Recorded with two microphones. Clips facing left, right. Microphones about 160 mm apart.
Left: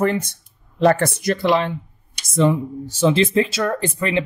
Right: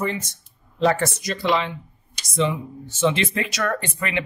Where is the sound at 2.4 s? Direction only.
40° left (ahead or behind).